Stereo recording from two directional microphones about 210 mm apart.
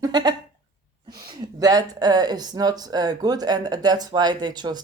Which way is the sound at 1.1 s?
20° right (ahead or behind).